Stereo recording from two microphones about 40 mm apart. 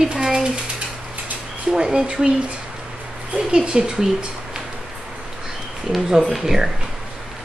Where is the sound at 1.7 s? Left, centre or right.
Centre.